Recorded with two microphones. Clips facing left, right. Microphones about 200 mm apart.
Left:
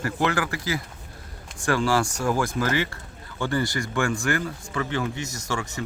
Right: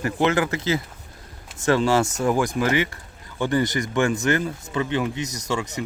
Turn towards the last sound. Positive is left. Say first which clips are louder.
# right 3 dB
turn(degrees=-20)  # may be behind; listen again after turning